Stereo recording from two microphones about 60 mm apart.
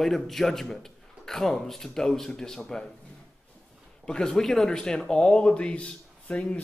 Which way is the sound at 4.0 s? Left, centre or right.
Centre.